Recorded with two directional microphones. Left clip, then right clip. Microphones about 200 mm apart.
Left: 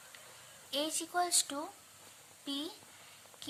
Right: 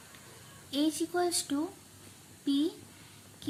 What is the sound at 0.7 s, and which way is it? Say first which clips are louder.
Speech: right 5 dB; 25° left (ahead or behind).